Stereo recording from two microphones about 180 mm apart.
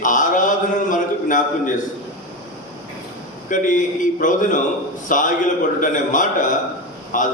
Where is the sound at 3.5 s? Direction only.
45° left (ahead or behind).